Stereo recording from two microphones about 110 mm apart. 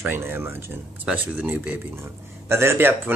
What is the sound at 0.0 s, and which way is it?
Speech, 20° right (ahead or behind).